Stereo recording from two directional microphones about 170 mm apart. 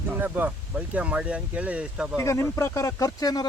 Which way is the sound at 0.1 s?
10° right (ahead or behind).